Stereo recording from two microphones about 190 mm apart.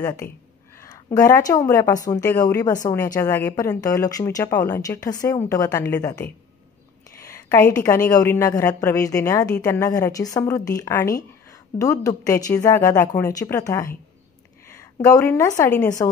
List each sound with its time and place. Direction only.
0.0 s a woman's voice: 15° left (ahead or behind)
0.7 s a sound: 15° left (ahead or behind)
1.0 s a woman's voice: 15° left (ahead or behind)
7.3 s a woman's voice: 15° left (ahead or behind)